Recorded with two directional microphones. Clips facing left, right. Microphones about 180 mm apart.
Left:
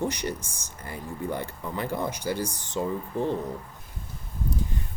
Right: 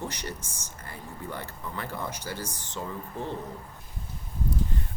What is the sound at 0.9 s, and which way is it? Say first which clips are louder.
Speech: left 7 dB; 15° left (ahead or behind).